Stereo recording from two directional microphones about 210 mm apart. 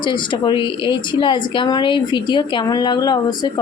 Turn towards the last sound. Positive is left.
turn(degrees=20)  # may be behind; listen again after turning